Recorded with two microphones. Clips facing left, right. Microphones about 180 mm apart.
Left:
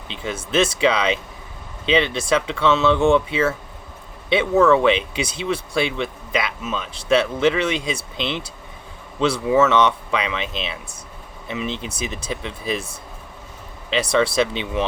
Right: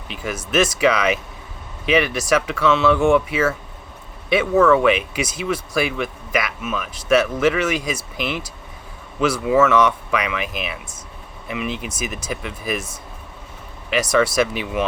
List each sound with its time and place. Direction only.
0.1 s speech: 25° left (ahead or behind)
13.9 s speech: 30° left (ahead or behind)